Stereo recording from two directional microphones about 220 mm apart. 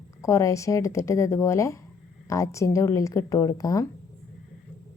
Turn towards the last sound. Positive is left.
turn(degrees=15)  # may be behind; listen again after turning